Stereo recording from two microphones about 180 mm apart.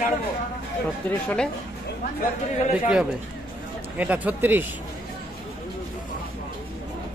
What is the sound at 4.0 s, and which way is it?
Speech, 10° right (ahead or behind).